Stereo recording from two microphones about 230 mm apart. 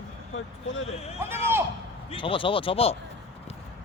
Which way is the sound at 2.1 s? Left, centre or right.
Left.